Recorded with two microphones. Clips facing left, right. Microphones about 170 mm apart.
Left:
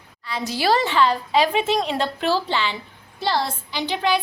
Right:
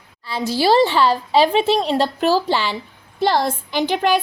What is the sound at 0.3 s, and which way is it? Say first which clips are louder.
A woman's voice: right 4 dB; 30° right (ahead or behind).